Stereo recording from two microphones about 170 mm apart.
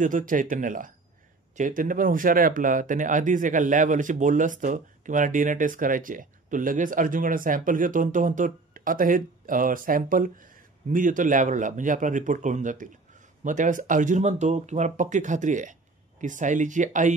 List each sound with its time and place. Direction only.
0.0 s speech: 50° right (ahead or behind)